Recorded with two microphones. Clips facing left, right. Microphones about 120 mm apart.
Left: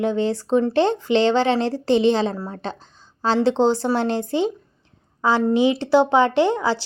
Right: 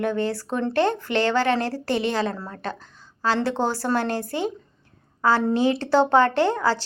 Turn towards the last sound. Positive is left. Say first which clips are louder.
# left 2 dB
turn(degrees=15)  # may be behind; listen again after turning